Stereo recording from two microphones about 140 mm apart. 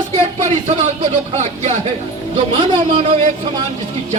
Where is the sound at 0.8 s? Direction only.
50° right (ahead or behind).